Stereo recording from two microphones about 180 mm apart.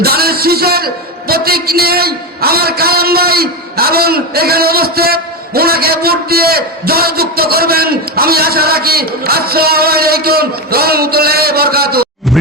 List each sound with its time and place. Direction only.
0.0 s a man's voice: 60° right (ahead or behind)